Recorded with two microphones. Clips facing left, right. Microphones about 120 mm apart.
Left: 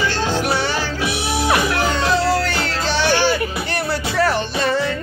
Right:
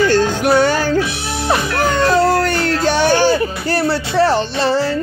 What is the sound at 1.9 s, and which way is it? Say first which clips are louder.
Music: right 8 dB; 50° right (ahead or behind).